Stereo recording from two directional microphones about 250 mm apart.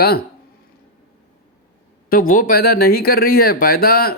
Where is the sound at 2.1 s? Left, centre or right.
Left.